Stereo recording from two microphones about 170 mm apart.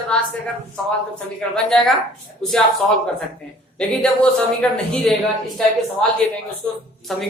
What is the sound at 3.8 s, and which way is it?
Speech, 5° left (ahead or behind).